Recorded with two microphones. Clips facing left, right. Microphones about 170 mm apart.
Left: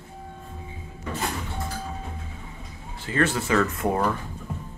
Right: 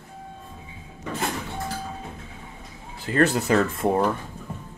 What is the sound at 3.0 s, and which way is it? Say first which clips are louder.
Speech: right 3 dB; 40° right (ahead or behind).